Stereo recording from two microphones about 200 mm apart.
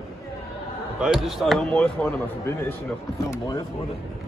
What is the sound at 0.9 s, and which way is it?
Speech, 5° right (ahead or behind).